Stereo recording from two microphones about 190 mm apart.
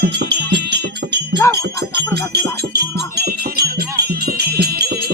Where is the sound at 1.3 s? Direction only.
15° left (ahead or behind).